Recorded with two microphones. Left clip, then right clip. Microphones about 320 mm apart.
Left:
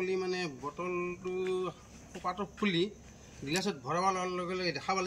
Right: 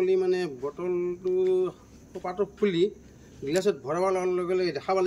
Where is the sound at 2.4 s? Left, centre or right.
Centre.